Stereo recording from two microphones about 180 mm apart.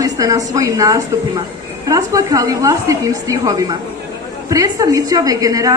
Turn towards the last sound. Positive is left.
turn(degrees=-20)  # may be behind; listen again after turning